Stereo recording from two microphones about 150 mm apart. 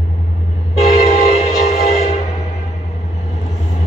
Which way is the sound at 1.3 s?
45° left (ahead or behind).